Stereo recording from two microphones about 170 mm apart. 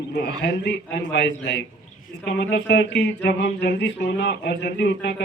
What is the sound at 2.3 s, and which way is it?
Speech, 80° left.